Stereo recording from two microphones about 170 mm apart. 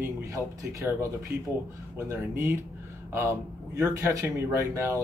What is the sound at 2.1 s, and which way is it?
Speech, 15° right (ahead or behind).